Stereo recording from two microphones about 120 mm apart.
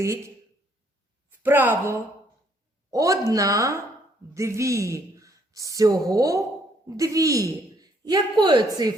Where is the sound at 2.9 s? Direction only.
30° right (ahead or behind).